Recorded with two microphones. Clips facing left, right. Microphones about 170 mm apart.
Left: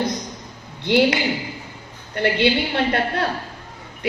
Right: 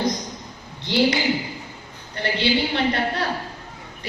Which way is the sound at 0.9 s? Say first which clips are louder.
Left 2 dB; 55° left (ahead or behind).